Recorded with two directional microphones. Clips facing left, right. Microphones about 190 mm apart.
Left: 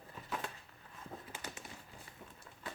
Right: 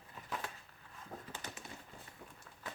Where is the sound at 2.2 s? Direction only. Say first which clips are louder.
Left 1 dB; 20° left (ahead or behind).